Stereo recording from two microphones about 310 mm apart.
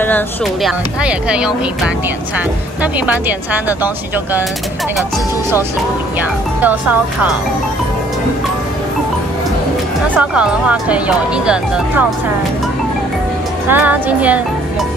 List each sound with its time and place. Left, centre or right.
0.0 s speech: centre
6.6 s speech: centre
10.1 s speech: centre
13.7 s speech: centre